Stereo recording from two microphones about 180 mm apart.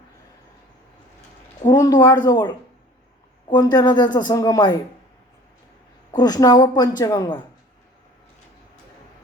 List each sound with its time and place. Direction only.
1.6 s speech: 20° left (ahead or behind)
3.5 s speech: 25° left (ahead or behind)
6.1 s speech: 20° left (ahead or behind)